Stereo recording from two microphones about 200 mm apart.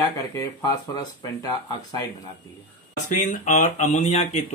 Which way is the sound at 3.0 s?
40° left (ahead or behind).